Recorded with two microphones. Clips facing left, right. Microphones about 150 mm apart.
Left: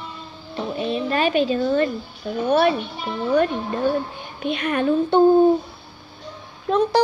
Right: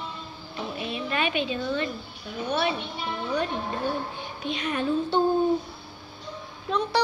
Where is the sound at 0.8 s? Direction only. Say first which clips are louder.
Left 7 dB; 35° left (ahead or behind).